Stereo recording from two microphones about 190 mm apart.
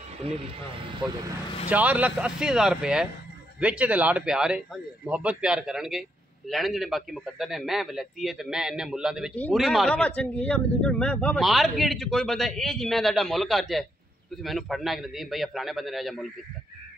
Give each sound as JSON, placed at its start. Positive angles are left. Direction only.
{"t": 0.2, "sound": "speech", "side_deg": -30}
{"t": 1.7, "sound": "speech", "side_deg": -10}